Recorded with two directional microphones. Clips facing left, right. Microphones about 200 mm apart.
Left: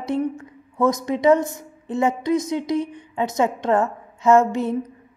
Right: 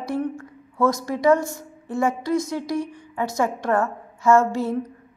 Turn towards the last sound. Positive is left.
turn(degrees=20)  # may be behind; listen again after turning